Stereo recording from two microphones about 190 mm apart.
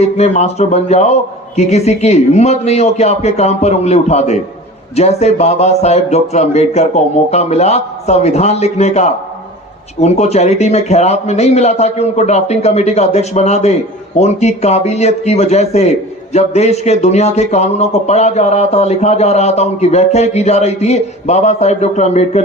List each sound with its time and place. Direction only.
0.0 s a man's voice: 35° left (ahead or behind)